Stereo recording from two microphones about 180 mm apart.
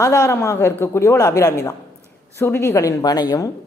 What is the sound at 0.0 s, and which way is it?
Speech, 15° left (ahead or behind).